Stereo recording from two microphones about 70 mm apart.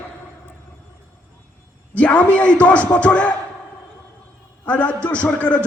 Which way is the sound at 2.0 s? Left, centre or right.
Left.